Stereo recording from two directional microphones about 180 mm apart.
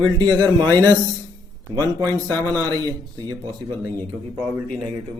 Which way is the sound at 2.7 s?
20° right (ahead or behind).